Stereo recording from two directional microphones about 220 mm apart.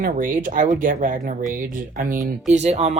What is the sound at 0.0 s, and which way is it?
Speech, 40° right (ahead or behind).